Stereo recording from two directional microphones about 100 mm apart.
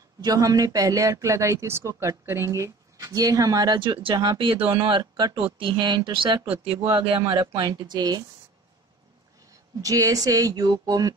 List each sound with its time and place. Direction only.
0.2 s speech: 40° right (ahead or behind)
3.8 s speech: 55° right (ahead or behind)
6.6 s speech: 70° right (ahead or behind)
7.3 s speech: 45° right (ahead or behind)
9.8 s speech: 35° right (ahead or behind)